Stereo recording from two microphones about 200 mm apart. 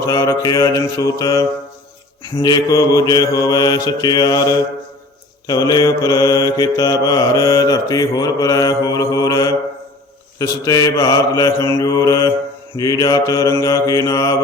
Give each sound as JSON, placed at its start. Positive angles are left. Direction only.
{"t": 0.0, "sound": "mantra", "side_deg": 15}